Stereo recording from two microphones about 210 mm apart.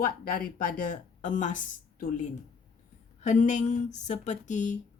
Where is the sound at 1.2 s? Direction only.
35° left (ahead or behind).